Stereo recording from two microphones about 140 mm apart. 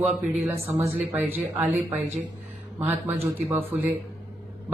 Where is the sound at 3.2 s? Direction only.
45° right (ahead or behind).